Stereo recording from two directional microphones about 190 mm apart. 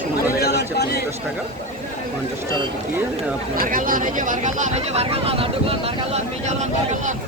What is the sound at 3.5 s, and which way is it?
Speech, 50° right (ahead or behind).